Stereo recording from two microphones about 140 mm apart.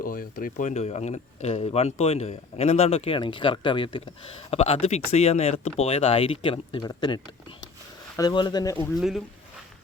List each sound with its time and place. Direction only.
0.0 s speech: 90° left
0.7 s speech: 50° left (ahead or behind); by 8.9 s 25° left (ahead or behind)
9.0 s speech: 5° right (ahead or behind)